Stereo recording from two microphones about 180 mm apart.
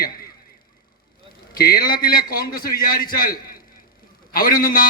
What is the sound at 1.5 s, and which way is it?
A man's voice, 60° left (ahead or behind).